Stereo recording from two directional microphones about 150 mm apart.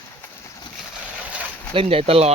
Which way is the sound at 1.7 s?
40° right (ahead or behind).